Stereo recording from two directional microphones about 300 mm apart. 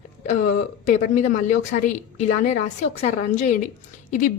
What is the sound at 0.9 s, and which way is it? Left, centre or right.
Speech, left.